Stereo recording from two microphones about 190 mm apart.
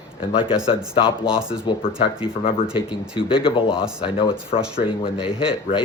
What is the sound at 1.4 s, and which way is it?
Speech, 5° right (ahead or behind).